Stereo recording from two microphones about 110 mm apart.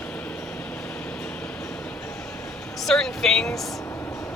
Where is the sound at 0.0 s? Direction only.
10° left (ahead or behind).